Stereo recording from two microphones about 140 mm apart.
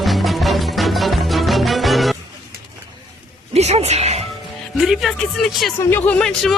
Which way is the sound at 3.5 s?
50° right (ahead or behind).